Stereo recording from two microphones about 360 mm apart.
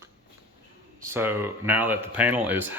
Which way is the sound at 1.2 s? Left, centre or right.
Centre.